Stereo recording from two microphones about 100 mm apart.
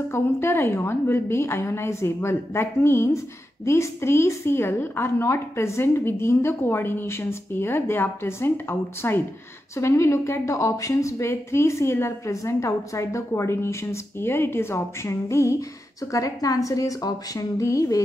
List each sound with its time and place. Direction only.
0.1 s a woman's voice: 25° left (ahead or behind)